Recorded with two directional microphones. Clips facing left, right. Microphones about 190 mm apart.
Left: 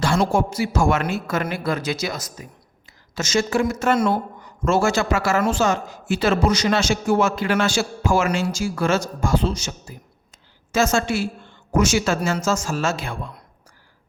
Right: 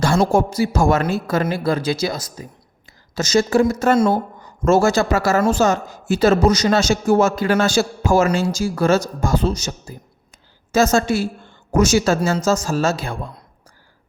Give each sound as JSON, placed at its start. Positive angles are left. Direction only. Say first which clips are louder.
{"t": 0.3, "sound": "a man's voice", "louder": "right 4 dB", "side_deg": -40}